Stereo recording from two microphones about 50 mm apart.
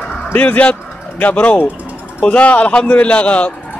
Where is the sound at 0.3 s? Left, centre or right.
Left.